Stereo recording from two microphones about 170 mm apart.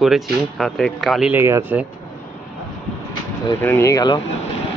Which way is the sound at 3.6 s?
15° left (ahead or behind).